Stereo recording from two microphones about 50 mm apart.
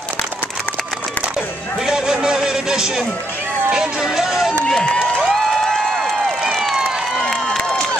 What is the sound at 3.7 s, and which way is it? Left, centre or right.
Speech, centre.